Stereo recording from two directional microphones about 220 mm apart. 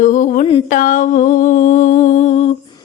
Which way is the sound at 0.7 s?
35° left (ahead or behind).